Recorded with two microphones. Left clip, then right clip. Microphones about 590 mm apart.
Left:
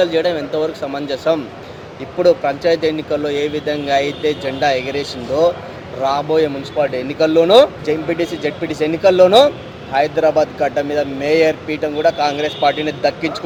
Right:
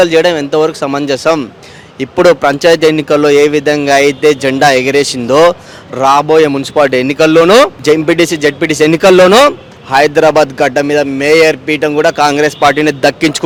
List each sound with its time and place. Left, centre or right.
0.0 s speech: right